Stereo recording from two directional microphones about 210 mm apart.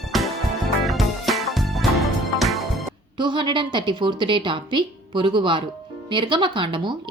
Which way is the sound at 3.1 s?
20° right (ahead or behind).